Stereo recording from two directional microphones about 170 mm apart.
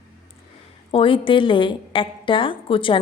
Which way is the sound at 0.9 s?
30° left (ahead or behind).